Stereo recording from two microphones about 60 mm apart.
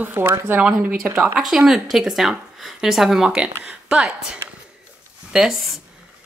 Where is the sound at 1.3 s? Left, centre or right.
Centre.